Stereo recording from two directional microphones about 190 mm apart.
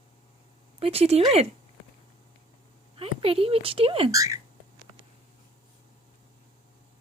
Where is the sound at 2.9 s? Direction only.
30° right (ahead or behind).